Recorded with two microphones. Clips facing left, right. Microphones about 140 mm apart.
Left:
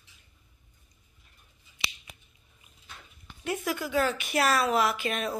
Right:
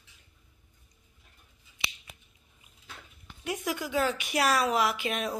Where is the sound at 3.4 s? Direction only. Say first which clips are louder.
Left 2 dB; 15° right (ahead or behind).